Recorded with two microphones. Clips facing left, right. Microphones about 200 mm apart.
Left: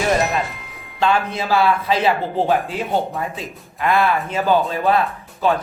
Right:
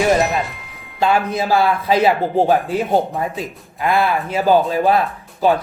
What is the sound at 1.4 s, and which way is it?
Speech, 40° right (ahead or behind).